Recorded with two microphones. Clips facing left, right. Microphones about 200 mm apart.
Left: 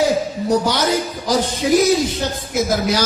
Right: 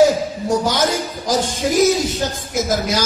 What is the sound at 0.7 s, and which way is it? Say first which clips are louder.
Speech: even; 45° right (ahead or behind).